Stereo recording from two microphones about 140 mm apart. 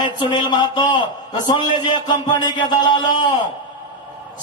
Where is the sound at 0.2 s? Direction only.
30° left (ahead or behind).